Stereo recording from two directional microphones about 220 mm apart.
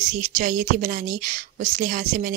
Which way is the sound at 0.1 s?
35° right (ahead or behind).